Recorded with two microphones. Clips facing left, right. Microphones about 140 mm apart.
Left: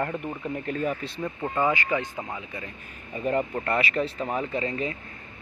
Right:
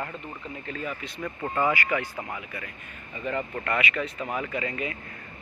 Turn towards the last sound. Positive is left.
turn(degrees=25)  # may be behind; listen again after turning